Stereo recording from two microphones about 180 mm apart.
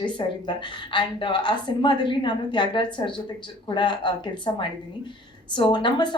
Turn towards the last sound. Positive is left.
turn(degrees=25)  # may be behind; listen again after turning